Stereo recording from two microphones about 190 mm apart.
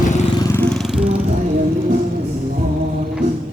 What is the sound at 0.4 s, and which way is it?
Vehicle, 10° left (ahead or behind).